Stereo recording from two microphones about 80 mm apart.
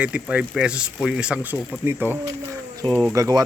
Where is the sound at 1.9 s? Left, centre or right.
Right.